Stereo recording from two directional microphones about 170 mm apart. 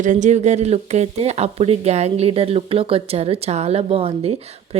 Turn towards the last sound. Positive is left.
turn(degrees=-35)  # may be behind; listen again after turning